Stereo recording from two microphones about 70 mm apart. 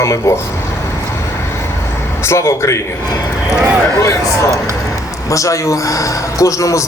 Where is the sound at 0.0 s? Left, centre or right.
Left.